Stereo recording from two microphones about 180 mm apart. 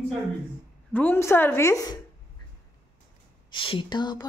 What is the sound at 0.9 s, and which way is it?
A woman's voice, 10° left (ahead or behind).